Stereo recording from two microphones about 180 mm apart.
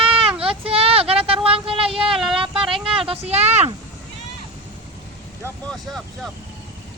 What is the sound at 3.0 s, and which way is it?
Speech, 35° right (ahead or behind).